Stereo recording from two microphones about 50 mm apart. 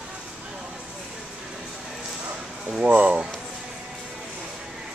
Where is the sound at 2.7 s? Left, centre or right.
Right.